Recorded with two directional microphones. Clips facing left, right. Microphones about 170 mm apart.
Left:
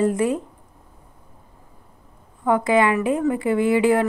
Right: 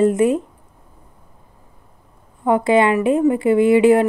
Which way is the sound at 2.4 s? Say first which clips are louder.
Right 3 dB; 25° right (ahead or behind).